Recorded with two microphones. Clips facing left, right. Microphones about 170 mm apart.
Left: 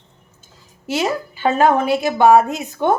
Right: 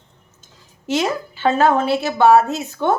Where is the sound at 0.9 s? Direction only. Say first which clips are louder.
Even; 10° left (ahead or behind).